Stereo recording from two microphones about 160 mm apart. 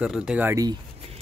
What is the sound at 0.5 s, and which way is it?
Speech, 25° right (ahead or behind).